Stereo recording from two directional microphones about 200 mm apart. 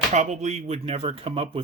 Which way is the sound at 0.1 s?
35° right (ahead or behind).